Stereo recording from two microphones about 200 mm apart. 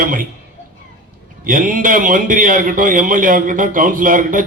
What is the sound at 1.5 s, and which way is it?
A man's voice, 45° right (ahead or behind).